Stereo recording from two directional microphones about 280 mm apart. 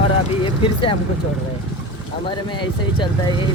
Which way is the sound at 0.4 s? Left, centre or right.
Centre.